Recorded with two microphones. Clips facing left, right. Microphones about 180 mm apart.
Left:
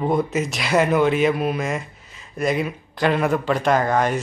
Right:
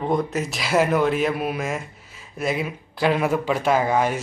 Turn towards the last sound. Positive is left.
turn(degrees=-5)  # may be behind; listen again after turning